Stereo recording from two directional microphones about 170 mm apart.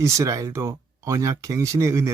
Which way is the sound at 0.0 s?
20° right (ahead or behind).